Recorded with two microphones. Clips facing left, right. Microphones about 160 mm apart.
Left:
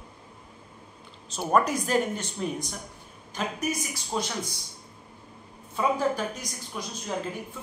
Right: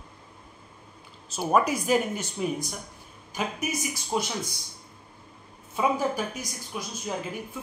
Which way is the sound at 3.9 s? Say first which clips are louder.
Right 2 dB; 15° right (ahead or behind).